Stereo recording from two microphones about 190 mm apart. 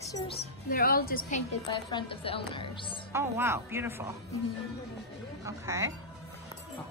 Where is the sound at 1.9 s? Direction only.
25° left (ahead or behind).